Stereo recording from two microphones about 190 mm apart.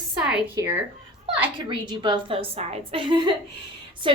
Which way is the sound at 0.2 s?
5° right (ahead or behind).